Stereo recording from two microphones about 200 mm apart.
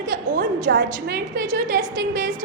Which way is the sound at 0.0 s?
45° right (ahead or behind).